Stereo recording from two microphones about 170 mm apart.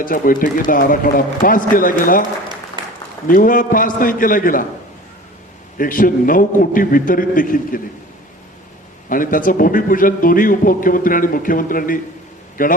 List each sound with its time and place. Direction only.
0.0 s a man's voice: 55° left (ahead or behind)
3.2 s a man's voice: 55° left (ahead or behind)
5.7 s a man's voice: 55° left (ahead or behind)
9.0 s a man's voice: 55° left (ahead or behind)